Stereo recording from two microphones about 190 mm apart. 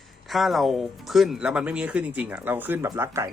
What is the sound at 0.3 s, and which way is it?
Speech, centre (ahead or behind).